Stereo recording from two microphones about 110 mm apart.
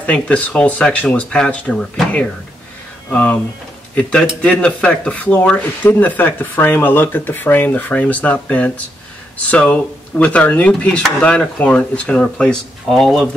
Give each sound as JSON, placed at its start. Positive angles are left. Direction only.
{"t": 0.0, "sound": "speech", "side_deg": 10}